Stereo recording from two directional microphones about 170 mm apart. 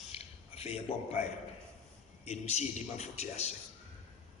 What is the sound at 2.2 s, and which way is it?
A man's voice, 40° left (ahead or behind).